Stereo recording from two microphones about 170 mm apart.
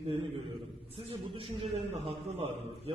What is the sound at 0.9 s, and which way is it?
A man's voice, 35° right (ahead or behind).